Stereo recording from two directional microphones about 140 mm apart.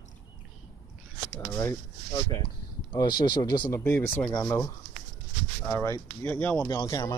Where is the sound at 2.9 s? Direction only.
30° left (ahead or behind).